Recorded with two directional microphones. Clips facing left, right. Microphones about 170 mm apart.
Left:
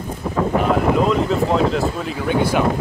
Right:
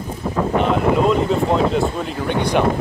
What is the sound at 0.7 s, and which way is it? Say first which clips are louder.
Speech: right 1 dB; centre (ahead or behind).